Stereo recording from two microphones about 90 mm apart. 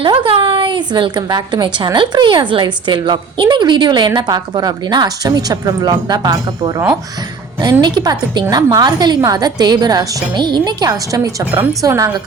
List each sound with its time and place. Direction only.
0.0 s a woman's voice: 85° right; by 10.2 s 45° right (ahead or behind)
10.3 s a woman's voice: 55° right (ahead or behind); by 12.1 s 35° right (ahead or behind)